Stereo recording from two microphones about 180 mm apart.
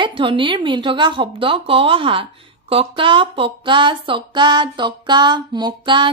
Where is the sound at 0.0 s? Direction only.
30° right (ahead or behind).